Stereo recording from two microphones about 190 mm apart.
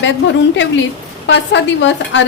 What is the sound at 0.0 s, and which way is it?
A woman's voice, 75° left (ahead or behind).